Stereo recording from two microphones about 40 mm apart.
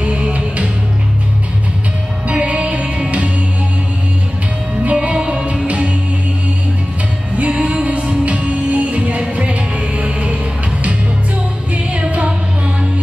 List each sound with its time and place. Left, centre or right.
0.0 s music: right
2.2 s music: right
4.8 s music: right
7.3 s music: right
11.7 s music: right